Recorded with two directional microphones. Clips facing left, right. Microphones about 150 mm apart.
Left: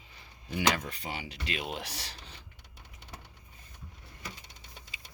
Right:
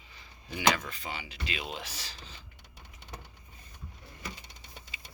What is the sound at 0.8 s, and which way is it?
Speech, 65° left (ahead or behind).